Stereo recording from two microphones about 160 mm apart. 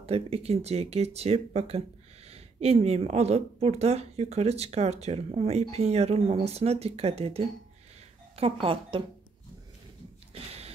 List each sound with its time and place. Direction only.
0.0 s a woman's voice: 40° right (ahead or behind)